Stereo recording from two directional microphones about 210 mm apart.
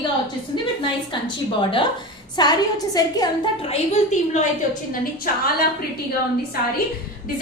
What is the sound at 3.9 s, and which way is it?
Speech, 35° left (ahead or behind).